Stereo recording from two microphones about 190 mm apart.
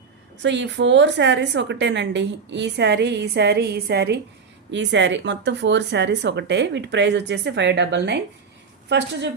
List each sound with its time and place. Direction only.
0.4 s a woman's voice: 70° right (ahead or behind)